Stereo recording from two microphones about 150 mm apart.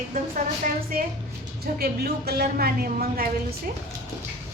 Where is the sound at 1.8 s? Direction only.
90° right.